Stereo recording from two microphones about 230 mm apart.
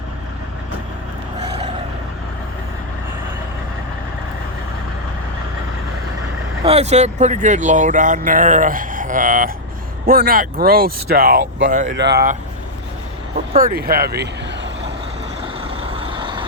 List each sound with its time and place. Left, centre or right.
1.4 s vehicle: right
6.7 s speech: right
11.9 s speech: right
13.5 s speech: right
15.6 s vehicle: right